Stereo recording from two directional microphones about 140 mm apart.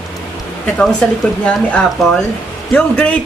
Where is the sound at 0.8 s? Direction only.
5° left (ahead or behind).